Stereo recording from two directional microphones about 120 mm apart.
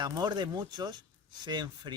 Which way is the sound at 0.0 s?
35° right (ahead or behind).